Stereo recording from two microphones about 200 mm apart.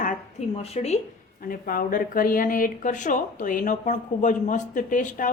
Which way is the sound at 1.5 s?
45° left (ahead or behind).